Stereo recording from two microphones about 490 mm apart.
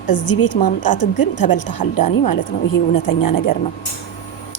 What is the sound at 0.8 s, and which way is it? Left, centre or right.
Speech, left.